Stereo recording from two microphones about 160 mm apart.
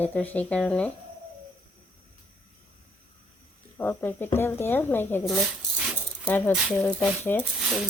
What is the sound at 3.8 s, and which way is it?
Speech, 15° left (ahead or behind).